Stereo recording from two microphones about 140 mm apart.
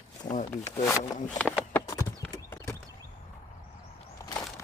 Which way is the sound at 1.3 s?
5° left (ahead or behind).